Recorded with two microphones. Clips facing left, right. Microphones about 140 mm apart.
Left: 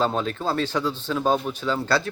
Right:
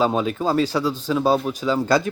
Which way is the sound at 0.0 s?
10° right (ahead or behind).